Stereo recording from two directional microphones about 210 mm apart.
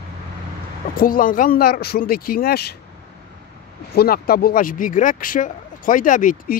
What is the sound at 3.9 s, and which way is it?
Speech, 45° left (ahead or behind).